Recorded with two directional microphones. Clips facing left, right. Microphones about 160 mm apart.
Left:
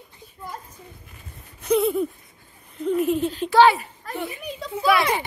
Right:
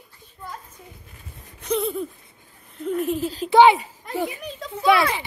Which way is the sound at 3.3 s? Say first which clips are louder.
Left 2 dB; 35° right (ahead or behind).